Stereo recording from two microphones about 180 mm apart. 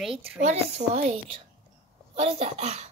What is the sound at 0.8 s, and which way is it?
Speech, 40° right (ahead or behind).